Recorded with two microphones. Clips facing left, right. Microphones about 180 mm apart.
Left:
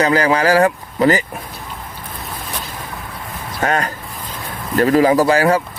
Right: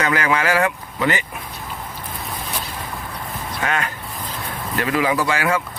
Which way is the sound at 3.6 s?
40° left (ahead or behind).